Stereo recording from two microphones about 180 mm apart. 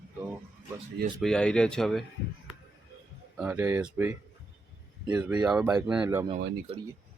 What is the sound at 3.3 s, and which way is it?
Speech, 10° right (ahead or behind).